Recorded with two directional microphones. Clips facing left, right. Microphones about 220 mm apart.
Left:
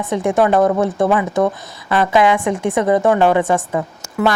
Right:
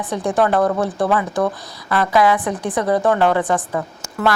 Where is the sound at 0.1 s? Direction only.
25° left (ahead or behind).